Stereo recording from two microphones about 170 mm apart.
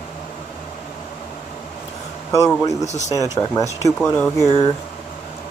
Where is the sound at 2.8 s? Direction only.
45° left (ahead or behind).